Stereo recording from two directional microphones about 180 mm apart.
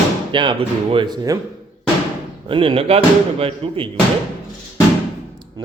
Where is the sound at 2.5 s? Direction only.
30° right (ahead or behind).